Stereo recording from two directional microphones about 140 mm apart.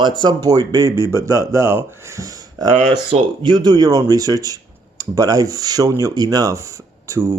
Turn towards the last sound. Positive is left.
turn(degrees=-20)  # may be behind; listen again after turning